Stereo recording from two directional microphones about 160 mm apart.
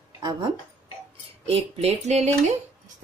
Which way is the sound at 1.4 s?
40° right (ahead or behind).